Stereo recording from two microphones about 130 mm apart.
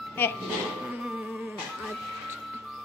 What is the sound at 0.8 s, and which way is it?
Music, 5° right (ahead or behind).